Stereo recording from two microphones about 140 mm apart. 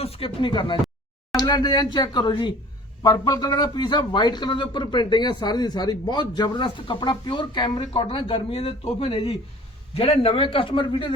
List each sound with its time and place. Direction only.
0.0 s speech: 45° left (ahead or behind)